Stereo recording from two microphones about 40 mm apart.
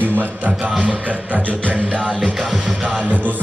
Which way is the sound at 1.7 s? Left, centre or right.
Right.